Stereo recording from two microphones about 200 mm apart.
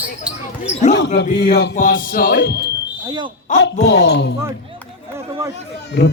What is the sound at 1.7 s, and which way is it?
Music, 40° left (ahead or behind).